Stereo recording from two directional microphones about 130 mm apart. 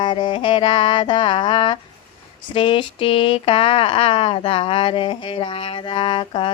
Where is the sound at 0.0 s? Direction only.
40° left (ahead or behind).